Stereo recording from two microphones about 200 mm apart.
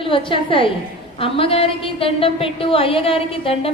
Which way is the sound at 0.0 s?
25° left (ahead or behind).